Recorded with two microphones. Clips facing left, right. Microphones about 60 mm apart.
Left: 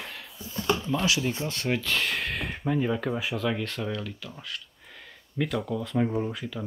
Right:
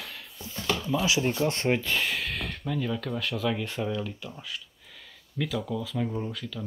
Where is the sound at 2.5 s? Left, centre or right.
Left.